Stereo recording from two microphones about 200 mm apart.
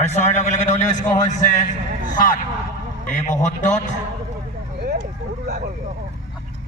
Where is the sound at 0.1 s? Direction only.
35° left (ahead or behind).